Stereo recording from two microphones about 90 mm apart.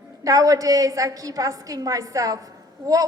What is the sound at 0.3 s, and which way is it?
A woman's voice, 40° right (ahead or behind).